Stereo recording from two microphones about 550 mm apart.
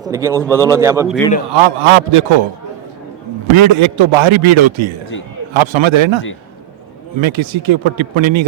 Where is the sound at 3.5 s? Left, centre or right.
Right.